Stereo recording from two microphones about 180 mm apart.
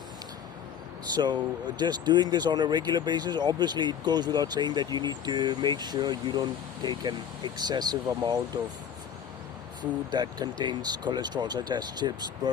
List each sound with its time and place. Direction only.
1.1 s speech: 25° right (ahead or behind)
10.1 s speech: 25° right (ahead or behind)